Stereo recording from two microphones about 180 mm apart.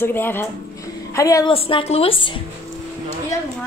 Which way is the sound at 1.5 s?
30° left (ahead or behind).